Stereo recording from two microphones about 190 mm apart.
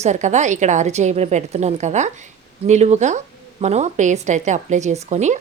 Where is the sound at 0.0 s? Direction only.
40° right (ahead or behind).